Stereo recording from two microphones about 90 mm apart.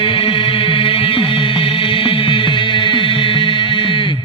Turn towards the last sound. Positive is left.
turn(degrees=70)  # may be behind; listen again after turning